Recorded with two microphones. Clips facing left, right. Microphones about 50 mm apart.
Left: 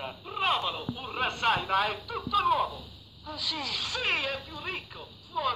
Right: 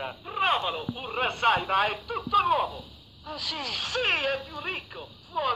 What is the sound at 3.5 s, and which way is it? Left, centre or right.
Speech, right.